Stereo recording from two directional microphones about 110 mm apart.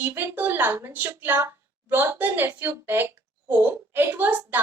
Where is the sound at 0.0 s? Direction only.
25° right (ahead or behind).